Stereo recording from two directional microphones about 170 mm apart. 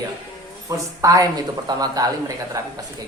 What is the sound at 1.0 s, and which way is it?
Speech, 20° right (ahead or behind).